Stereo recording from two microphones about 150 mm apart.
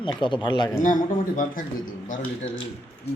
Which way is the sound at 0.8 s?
65° left (ahead or behind).